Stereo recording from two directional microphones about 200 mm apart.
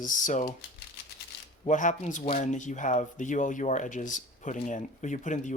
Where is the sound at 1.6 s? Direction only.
40° left (ahead or behind).